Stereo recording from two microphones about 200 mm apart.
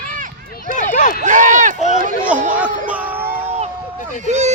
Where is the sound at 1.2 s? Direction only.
35° right (ahead or behind).